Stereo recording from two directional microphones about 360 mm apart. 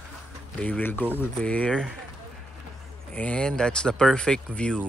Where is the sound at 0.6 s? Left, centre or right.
Centre.